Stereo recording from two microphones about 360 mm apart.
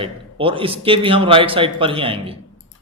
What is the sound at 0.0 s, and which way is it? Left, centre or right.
A man's voice, centre.